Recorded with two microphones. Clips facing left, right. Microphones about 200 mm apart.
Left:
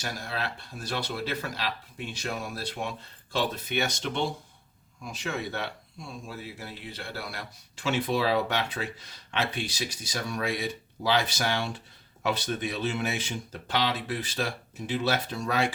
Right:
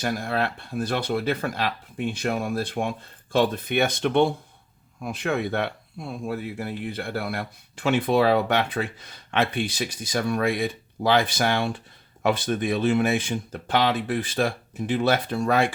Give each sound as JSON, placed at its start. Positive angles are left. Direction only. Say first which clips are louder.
{"t": 0.0, "sound": "speech", "louder": "right 8 dB", "side_deg": -55}